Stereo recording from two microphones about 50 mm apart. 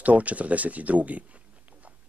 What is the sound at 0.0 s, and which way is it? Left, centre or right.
Speech, right.